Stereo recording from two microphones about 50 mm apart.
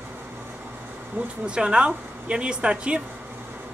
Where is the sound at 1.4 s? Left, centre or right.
Centre.